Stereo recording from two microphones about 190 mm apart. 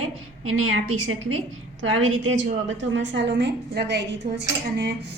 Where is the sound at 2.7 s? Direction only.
70° right (ahead or behind).